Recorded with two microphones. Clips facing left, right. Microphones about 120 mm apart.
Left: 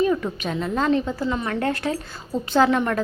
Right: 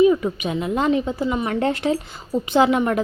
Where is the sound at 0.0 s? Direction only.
10° right (ahead or behind).